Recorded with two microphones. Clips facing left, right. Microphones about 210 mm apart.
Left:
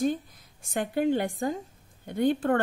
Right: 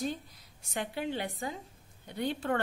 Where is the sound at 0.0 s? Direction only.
50° left (ahead or behind).